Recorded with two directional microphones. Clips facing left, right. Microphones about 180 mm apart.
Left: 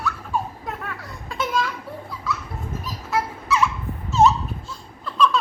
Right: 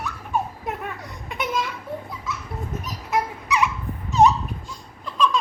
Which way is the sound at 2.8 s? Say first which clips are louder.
Even; 15° right (ahead or behind).